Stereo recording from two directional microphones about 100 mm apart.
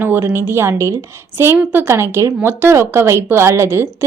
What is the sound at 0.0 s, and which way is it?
A woman's voice, 20° right (ahead or behind).